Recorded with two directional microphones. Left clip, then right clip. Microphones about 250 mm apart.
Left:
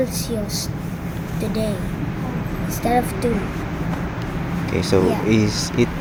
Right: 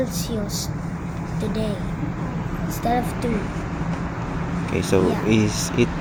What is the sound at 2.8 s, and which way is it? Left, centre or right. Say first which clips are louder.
Speech: left 4 dB; centre.